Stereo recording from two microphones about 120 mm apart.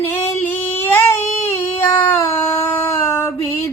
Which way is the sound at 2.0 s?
15° left (ahead or behind).